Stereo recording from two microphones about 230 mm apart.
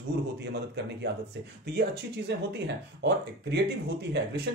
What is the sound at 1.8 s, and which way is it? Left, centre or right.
Speech, right.